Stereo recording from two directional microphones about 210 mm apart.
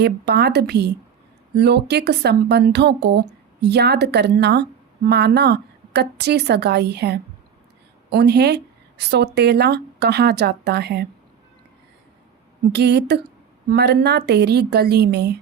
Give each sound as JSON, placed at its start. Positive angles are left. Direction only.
{"t": 0.0, "sound": "speech", "side_deg": -50}
{"t": 12.7, "sound": "speech", "side_deg": -50}